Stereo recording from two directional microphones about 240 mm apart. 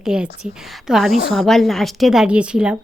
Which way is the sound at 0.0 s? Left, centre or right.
Centre.